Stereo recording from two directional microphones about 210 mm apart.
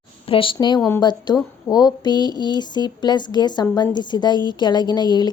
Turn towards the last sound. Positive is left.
turn(degrees=20)  # may be behind; listen again after turning